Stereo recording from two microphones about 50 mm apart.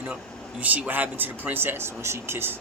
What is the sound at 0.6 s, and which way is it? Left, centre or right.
Speech, right.